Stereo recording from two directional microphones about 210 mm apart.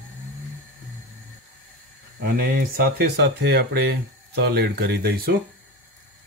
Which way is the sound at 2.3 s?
45° right (ahead or behind).